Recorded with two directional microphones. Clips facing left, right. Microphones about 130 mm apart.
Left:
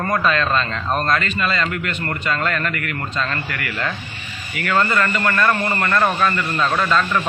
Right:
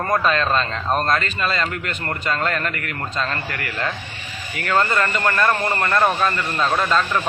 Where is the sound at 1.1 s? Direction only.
35° right (ahead or behind).